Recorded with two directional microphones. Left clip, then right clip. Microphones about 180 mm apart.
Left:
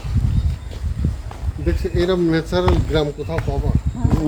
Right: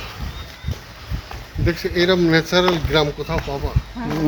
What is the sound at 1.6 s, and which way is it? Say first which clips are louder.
Speech: right 2 dB; 25° left (ahead or behind).